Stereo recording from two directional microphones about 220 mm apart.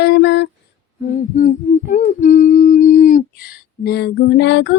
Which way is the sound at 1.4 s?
35° left (ahead or behind).